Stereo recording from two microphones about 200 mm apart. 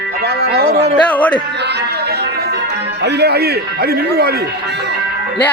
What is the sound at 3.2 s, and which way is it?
A man's voice, 55° right (ahead or behind).